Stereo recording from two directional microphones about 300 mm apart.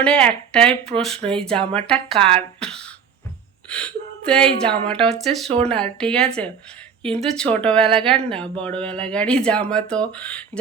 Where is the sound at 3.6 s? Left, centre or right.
Centre.